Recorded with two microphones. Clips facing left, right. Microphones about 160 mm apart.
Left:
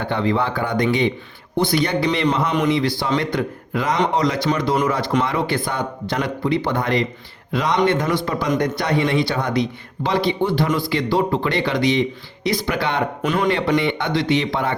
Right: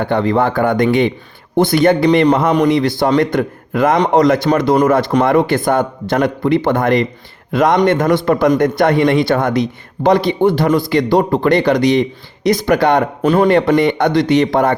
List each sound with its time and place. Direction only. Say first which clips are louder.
0.0 s speech: right 6 dB; 50° right (ahead or behind); by 13.5 s 35° right (ahead or behind)
13.5 s speech: right 7 dB; 50° right (ahead or behind)